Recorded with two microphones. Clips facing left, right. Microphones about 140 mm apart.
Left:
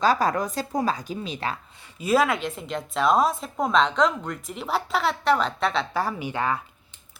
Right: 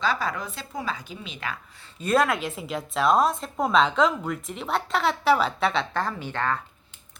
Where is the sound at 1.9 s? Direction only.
5° left (ahead or behind).